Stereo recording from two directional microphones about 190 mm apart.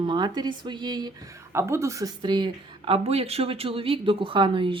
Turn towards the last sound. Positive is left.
turn(degrees=-25)  # may be behind; listen again after turning